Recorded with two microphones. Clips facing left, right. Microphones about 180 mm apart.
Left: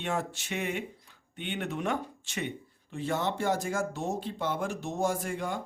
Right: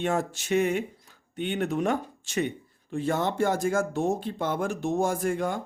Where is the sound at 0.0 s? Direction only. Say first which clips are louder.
Right 5 dB; 45° right (ahead or behind).